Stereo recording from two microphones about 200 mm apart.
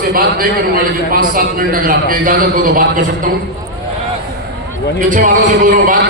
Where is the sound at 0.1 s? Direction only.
45° right (ahead or behind).